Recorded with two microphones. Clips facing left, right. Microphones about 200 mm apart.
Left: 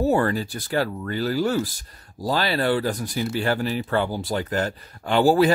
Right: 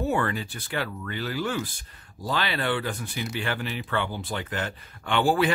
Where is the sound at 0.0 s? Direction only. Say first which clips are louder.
Left 6 dB; 35° left (ahead or behind).